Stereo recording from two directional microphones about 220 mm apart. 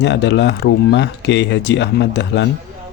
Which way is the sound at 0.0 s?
50° left (ahead or behind).